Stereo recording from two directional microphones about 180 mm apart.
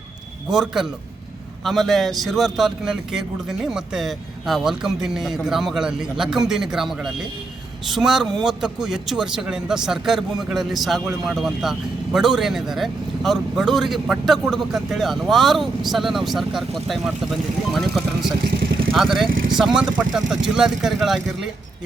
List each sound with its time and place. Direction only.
0.5 s speech: centre (ahead or behind)
18.4 s vehicle: 65° right (ahead or behind)
18.9 s speech: centre (ahead or behind)